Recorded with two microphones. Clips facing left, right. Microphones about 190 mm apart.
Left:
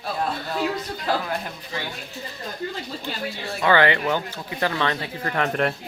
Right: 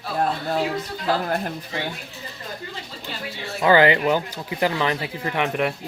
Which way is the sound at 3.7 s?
20° right (ahead or behind).